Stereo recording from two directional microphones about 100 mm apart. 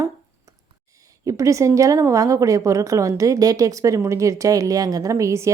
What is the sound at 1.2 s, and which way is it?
A woman's voice, 35° right (ahead or behind).